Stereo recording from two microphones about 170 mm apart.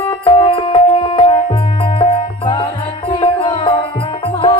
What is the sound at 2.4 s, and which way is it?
Music, 30° left (ahead or behind).